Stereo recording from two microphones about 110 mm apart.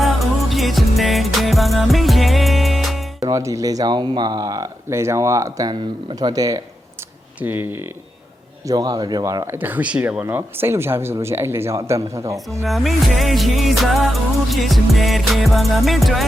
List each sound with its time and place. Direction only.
0.0 s music: centre (ahead or behind)
3.2 s speech: 30° right (ahead or behind)
7.3 s speech: 20° right (ahead or behind)
8.6 s speech: 35° right (ahead or behind)
9.6 s speech: 15° right (ahead or behind)
12.6 s music: centre (ahead or behind)